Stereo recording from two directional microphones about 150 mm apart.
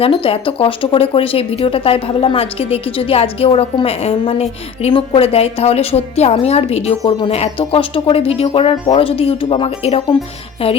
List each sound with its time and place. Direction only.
0.0 s speech: 40° left (ahead or behind)